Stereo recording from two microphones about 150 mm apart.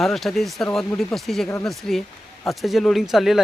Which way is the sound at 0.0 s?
Centre (ahead or behind).